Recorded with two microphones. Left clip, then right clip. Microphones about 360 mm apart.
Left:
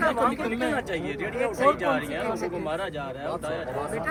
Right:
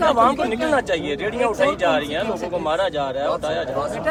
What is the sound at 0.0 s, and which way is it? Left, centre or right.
Speech, right.